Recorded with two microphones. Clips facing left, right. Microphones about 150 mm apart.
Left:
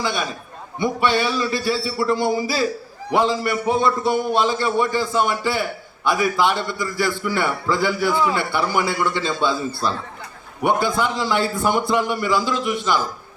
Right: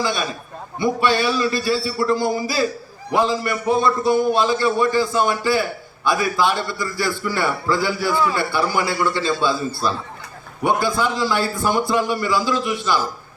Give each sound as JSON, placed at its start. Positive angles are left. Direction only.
{"t": 0.0, "sound": "a man's voice", "side_deg": 20}